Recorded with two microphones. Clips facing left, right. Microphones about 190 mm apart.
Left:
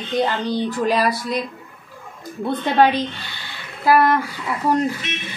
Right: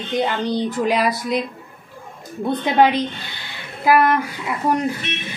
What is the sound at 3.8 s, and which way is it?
Speech, 10° right (ahead or behind).